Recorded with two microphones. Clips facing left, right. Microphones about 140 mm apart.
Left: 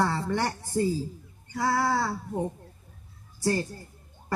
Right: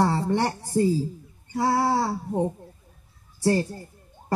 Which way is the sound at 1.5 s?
30° right (ahead or behind).